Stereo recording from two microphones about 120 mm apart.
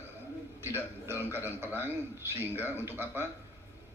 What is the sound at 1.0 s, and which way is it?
A man's voice, 20° right (ahead or behind).